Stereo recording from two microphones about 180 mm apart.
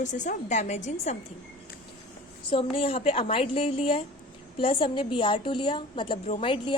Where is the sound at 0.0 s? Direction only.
40° left (ahead or behind).